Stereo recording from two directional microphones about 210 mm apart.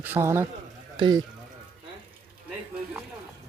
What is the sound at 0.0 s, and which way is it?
A man's voice, 10° right (ahead or behind).